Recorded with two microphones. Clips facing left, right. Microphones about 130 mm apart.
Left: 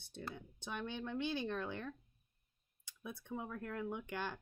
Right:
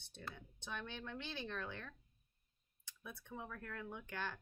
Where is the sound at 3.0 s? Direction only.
15° left (ahead or behind).